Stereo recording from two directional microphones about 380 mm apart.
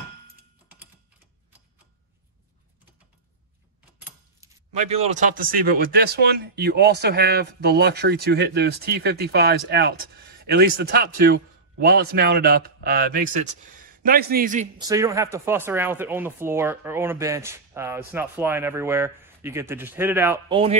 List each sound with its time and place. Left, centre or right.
4.7 s a man's voice: centre